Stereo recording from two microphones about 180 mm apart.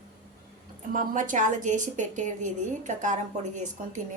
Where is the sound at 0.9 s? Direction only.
45° right (ahead or behind).